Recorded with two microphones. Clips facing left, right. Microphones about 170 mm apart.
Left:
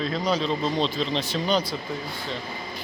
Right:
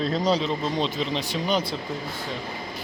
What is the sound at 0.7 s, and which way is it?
Speech, 15° right (ahead or behind).